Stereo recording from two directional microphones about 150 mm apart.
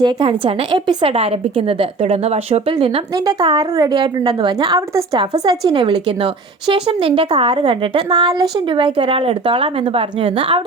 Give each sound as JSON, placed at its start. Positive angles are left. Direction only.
{"t": 0.0, "sound": "a woman's voice", "side_deg": -35}